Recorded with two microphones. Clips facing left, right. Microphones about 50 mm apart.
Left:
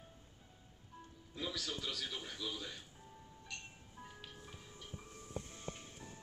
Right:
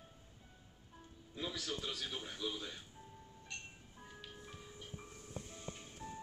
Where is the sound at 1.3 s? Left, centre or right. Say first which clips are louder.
Even; right.